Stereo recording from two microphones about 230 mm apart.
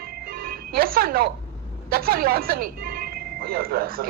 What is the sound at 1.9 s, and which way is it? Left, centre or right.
Speech, right.